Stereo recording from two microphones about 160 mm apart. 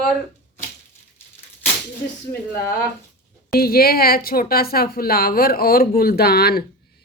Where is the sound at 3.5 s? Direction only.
70° left (ahead or behind).